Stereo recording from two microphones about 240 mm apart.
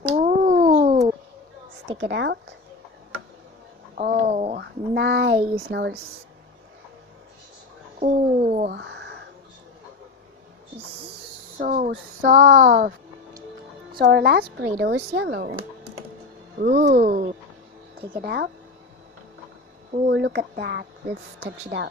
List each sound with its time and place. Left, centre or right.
0.0 s a sound: right
1.9 s speech: right
3.9 s speech: right
4.6 s speech: right
7.9 s speech: right
8.7 s a sound: right
11.6 s speech: right
13.9 s speech: right
20.1 s speech: right